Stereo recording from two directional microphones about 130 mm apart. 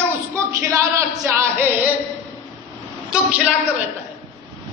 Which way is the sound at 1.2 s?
20° right (ahead or behind).